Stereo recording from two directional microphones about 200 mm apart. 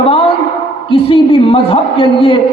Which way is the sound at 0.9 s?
25° left (ahead or behind).